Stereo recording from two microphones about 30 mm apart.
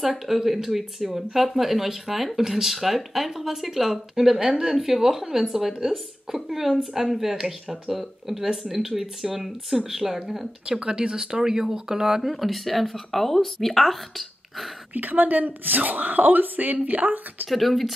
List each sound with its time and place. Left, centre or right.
0.0 s speech: centre
10.8 s speech: right
12.2 s speech: centre
15.0 s speech: right
17.5 s speech: centre